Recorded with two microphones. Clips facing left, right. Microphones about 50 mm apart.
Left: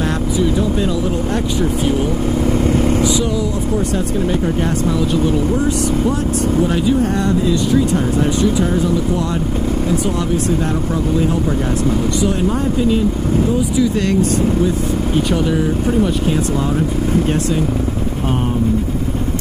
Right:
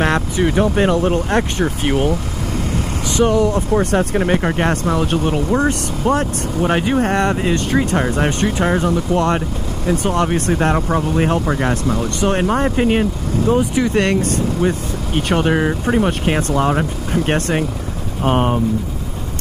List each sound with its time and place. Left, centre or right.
0.0 s speech: right
2.4 s vehicle: left
3.0 s speech: right